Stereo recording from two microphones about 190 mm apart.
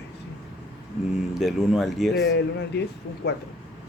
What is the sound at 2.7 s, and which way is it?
Speech, 60° left (ahead or behind).